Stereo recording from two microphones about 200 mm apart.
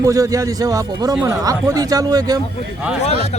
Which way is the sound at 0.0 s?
15° right (ahead or behind).